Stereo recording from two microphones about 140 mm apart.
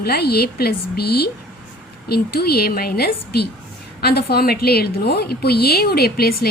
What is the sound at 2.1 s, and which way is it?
A woman's voice, 90° left.